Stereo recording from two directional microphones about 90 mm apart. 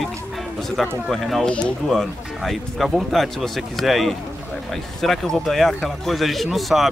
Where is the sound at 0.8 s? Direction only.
Centre (ahead or behind).